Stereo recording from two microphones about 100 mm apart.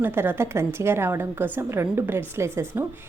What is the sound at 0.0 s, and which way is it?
A woman's voice, 20° right (ahead or behind).